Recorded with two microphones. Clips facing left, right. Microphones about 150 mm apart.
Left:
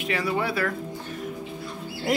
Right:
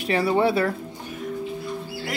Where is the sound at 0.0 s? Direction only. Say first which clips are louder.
Right 6 dB; 35° right (ahead or behind).